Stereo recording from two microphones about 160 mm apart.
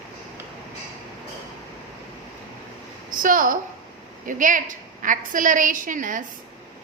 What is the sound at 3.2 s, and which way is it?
A woman's voice, 55° right (ahead or behind).